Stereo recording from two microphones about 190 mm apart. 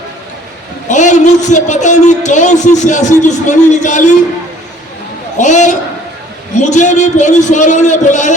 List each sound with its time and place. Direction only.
0.9 s a man's voice: 40° left (ahead or behind)
5.4 s a man's voice: 40° left (ahead or behind)